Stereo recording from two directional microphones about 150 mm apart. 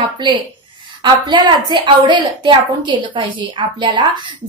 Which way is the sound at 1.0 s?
30° right (ahead or behind).